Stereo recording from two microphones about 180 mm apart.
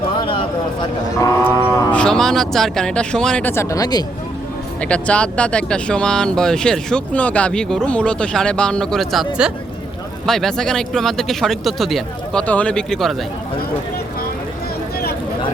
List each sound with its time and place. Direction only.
0.3 s speech: 25° left (ahead or behind)
1.5 s cattle: 15° left (ahead or behind)
4.8 s speech: 5° left (ahead or behind)